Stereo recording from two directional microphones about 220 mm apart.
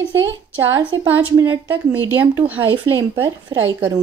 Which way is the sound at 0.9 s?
60° right (ahead or behind).